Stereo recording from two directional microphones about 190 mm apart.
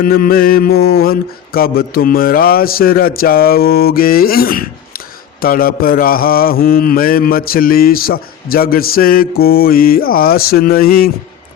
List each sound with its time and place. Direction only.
0.0 s mantra: 50° left (ahead or behind)